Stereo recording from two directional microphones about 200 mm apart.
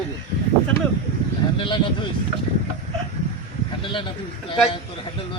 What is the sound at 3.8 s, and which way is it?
Speech, 25° left (ahead or behind).